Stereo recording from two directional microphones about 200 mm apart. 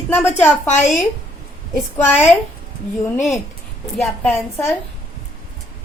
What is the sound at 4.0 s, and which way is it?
Speech, 10° left (ahead or behind).